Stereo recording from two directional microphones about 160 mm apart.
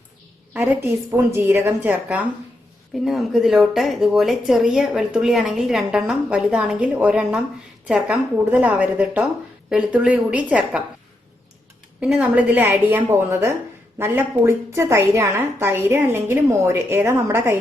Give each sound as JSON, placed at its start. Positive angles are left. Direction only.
{"t": 0.5, "sound": "a woman's voice", "side_deg": -10}
{"t": 11.9, "sound": "a woman's voice", "side_deg": -5}